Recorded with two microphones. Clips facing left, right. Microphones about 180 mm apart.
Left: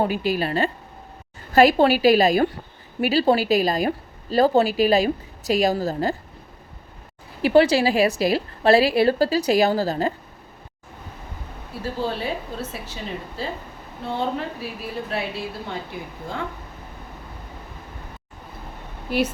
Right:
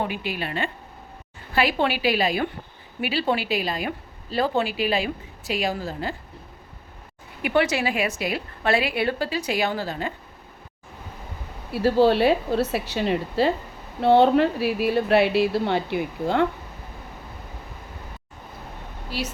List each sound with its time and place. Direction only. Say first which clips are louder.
0.0 s a woman's voice: left 6 dB; 40° left (ahead or behind)
7.4 s a woman's voice: left 6 dB; 30° left (ahead or behind)
11.7 s a woman's voice: right 9 dB; 75° right (ahead or behind)
19.1 s speech: left 8 dB; 55° left (ahead or behind)